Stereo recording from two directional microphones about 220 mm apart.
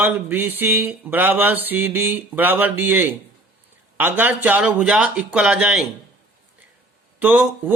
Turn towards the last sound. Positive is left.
turn(degrees=-10)  # may be behind; listen again after turning